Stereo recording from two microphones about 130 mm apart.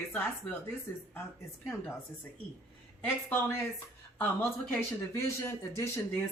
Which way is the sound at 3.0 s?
20° left (ahead or behind).